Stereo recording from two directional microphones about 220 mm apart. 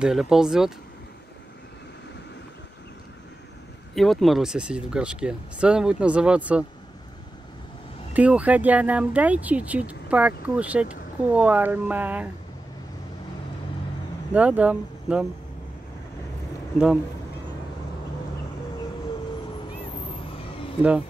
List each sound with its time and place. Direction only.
0.0 s speech: centre (ahead or behind)
3.9 s speech: centre (ahead or behind)
8.1 s speech: 5° right (ahead or behind)
14.3 s speech: 5° right (ahead or behind)
16.7 s speech: 5° right (ahead or behind)
20.2 s a sound: 25° left (ahead or behind)